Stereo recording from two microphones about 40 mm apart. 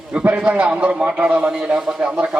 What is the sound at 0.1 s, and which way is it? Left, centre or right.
A man's voice, right.